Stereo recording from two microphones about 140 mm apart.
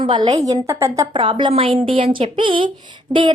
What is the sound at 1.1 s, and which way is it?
A woman's voice, 35° right (ahead or behind).